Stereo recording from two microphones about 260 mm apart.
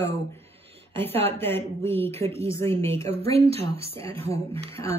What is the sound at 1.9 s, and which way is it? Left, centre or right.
Speech, centre.